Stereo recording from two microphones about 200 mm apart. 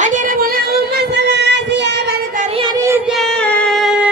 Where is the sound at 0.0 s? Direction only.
40° right (ahead or behind); by 2.1 s 60° right (ahead or behind).